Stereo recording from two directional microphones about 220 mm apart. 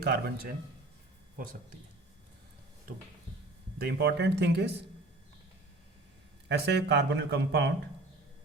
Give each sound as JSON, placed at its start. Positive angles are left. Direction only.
{"t": 0.0, "sound": "speech", "side_deg": -45}
{"t": 3.8, "sound": "speech", "side_deg": -50}
{"t": 6.5, "sound": "speech", "side_deg": -50}